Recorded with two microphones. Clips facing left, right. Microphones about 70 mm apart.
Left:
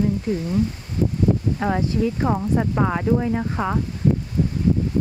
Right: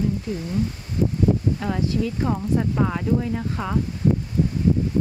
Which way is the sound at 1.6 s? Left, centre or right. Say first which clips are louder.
Left 3 dB; left.